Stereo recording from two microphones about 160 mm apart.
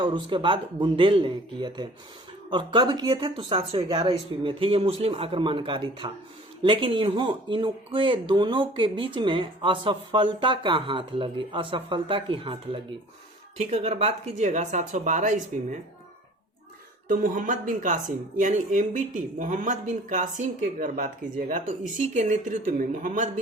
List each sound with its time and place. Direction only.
0.0 s speech: 30° right (ahead or behind); by 15.8 s 50° right (ahead or behind)
17.1 s speech: 55° right (ahead or behind)